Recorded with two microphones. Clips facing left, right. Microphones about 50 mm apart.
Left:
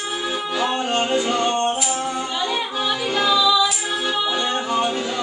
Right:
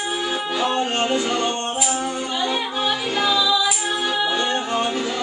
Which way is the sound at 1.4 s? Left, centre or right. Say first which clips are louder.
Left 3 dB; left.